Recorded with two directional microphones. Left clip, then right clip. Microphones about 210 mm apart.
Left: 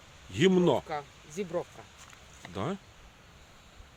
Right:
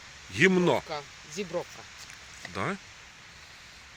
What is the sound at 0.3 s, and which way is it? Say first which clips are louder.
Speech: right 2 dB; 15° left (ahead or behind).